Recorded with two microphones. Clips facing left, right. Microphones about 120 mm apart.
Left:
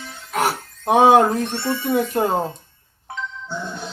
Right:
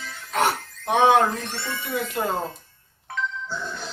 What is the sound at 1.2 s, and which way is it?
Speech, 25° left (ahead or behind).